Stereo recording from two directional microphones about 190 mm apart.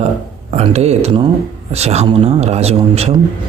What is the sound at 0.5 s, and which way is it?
Speech, 35° right (ahead or behind).